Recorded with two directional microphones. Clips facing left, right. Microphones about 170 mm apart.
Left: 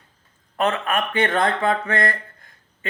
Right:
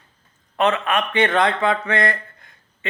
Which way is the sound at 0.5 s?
45° left (ahead or behind).